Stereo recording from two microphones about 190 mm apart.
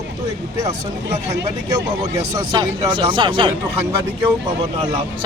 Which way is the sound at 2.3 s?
25° right (ahead or behind).